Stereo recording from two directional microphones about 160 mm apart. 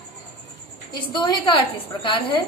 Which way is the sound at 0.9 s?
30° left (ahead or behind).